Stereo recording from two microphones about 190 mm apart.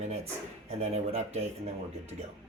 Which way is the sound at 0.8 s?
35° right (ahead or behind).